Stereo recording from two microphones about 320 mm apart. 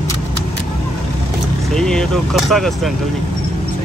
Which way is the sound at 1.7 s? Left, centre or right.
Centre.